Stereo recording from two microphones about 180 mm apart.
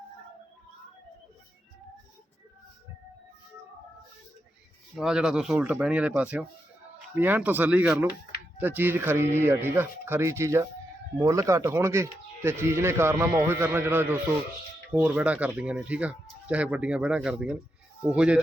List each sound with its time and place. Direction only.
4.9 s speech: 5° right (ahead or behind)